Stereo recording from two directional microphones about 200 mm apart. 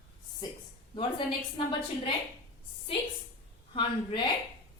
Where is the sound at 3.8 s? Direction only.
25° left (ahead or behind).